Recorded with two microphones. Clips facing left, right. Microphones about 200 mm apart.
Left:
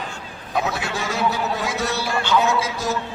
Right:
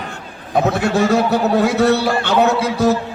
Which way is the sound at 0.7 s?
55° right (ahead or behind).